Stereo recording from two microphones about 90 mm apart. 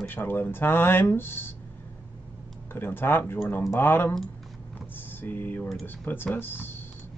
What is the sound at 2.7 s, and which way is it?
Speech, 25° left (ahead or behind).